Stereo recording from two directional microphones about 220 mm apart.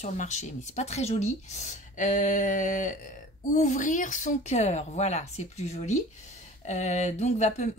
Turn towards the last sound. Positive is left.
turn(degrees=30)  # may be behind; listen again after turning